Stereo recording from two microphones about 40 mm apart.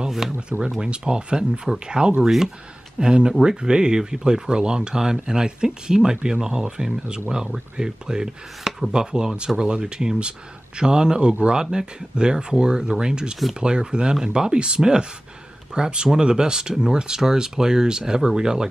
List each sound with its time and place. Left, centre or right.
0.7 s speech: right
2.2 s speech: centre
3.0 s speech: right